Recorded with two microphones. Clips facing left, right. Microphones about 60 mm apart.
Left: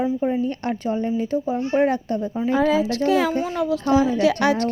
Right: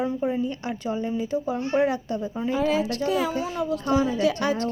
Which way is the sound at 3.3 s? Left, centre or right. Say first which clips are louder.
Left 4 dB; left.